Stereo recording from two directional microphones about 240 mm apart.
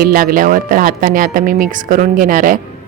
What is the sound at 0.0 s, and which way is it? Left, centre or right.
A woman's voice, right.